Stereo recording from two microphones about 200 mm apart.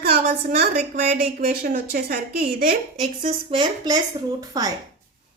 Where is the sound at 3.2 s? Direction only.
25° right (ahead or behind).